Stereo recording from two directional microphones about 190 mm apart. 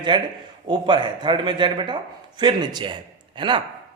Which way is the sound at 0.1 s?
25° right (ahead or behind).